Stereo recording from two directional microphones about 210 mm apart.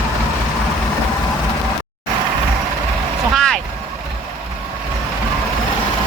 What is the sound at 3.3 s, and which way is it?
Vehicle, 5° left (ahead or behind).